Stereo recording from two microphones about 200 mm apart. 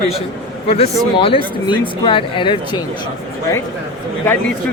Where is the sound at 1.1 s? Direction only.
25° left (ahead or behind).